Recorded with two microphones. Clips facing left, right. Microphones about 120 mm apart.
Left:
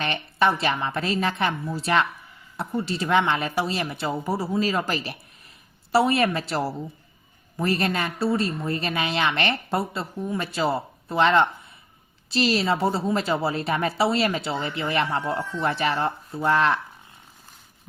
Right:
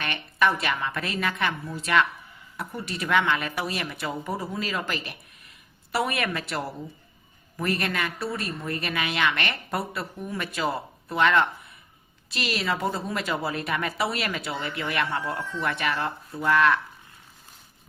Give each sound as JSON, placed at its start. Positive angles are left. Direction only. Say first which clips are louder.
{"t": 0.0, "sound": "a woman's voice", "louder": "left 2 dB", "side_deg": 30}